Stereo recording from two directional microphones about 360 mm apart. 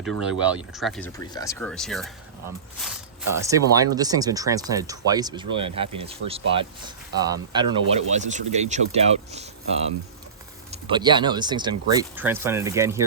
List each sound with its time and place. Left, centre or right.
0.0 s speech: centre
10.7 s speech: centre